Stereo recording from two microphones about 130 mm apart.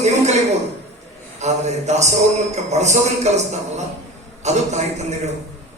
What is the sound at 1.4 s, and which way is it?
A man's voice, 60° right (ahead or behind).